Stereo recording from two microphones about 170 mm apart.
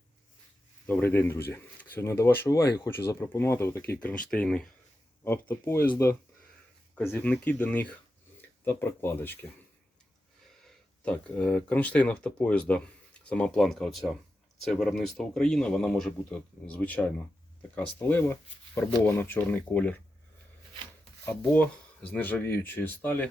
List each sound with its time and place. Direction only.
0.9 s speech: 10° left (ahead or behind)
6.9 s speech: 10° left (ahead or behind)
11.0 s speech: 5° left (ahead or behind)
21.2 s speech: 10° left (ahead or behind)